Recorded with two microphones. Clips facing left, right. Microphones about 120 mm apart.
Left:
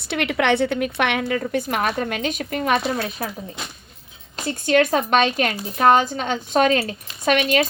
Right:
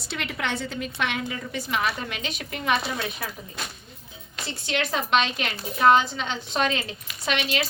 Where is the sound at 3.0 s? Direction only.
35° left (ahead or behind).